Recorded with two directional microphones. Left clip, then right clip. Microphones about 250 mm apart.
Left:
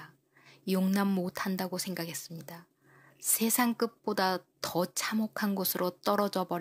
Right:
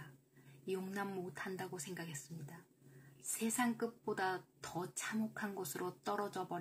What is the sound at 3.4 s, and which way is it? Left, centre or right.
A woman's voice, left.